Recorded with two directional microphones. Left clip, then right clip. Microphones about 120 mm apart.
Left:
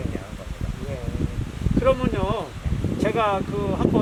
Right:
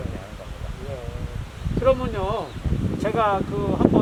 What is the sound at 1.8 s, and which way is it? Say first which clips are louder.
Speech: right 1 dB; centre (ahead or behind).